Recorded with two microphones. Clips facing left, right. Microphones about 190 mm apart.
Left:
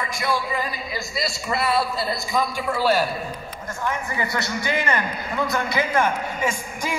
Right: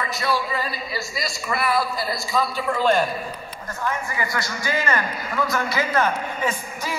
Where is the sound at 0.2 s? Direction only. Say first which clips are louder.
Even; 15° left (ahead or behind).